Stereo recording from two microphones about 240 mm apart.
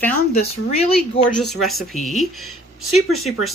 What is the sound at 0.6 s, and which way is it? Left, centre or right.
Speech, left.